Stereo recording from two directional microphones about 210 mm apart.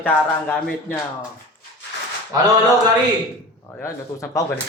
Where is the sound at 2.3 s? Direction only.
15° right (ahead or behind).